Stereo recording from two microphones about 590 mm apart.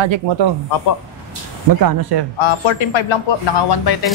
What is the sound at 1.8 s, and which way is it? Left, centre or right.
Speech, right.